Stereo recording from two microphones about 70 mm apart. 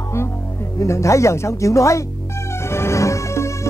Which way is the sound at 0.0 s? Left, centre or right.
Left.